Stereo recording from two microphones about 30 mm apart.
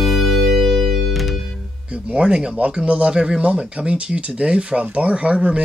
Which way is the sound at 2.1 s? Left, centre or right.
Right.